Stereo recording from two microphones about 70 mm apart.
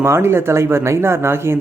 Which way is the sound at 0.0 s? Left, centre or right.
Right.